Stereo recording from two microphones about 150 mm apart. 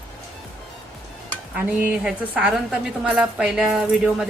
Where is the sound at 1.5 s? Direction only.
10° right (ahead or behind).